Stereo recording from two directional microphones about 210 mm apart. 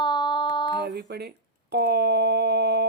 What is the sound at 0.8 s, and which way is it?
Speech, 50° right (ahead or behind).